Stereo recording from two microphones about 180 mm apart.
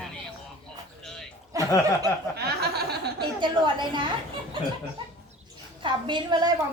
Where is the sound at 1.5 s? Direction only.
15° right (ahead or behind).